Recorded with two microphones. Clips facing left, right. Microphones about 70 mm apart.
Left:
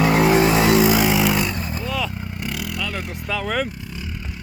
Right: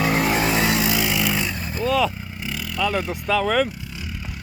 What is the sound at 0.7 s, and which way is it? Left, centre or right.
Vehicle, left.